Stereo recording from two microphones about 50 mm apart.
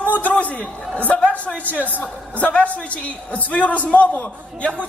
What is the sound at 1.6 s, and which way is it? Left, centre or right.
A woman's voice, left.